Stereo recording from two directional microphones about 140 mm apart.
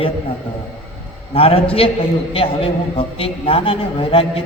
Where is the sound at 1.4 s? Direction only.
40° left (ahead or behind).